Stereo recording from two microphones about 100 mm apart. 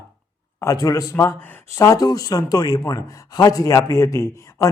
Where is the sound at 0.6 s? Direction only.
35° left (ahead or behind).